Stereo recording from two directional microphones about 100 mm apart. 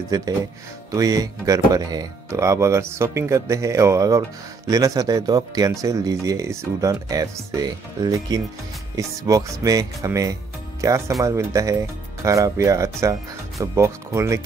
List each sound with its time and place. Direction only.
0.1 s speech: 40° right (ahead or behind)